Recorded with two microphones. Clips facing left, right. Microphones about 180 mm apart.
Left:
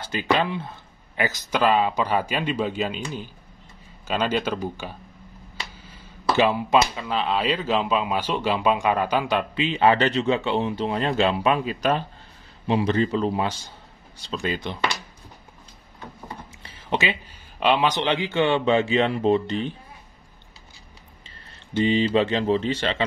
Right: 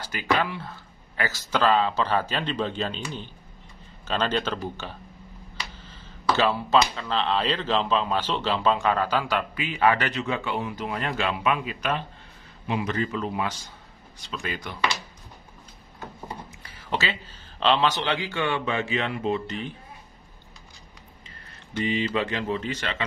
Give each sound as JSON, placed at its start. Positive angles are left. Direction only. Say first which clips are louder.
{"t": 0.0, "sound": "speech", "louder": "left 3 dB", "side_deg": 25}
{"t": 4.1, "sound": "speech", "louder": "left 2 dB", "side_deg": 10}
{"t": 5.8, "sound": "a sound", "louder": "even", "side_deg": 10}
{"t": 7.0, "sound": "a man's voice", "louder": "left 1 dB", "side_deg": 10}
{"t": 16.6, "sound": "speech", "louder": "left 4 dB", "side_deg": 20}
{"t": 21.7, "sound": "speech", "louder": "left 6 dB", "side_deg": 30}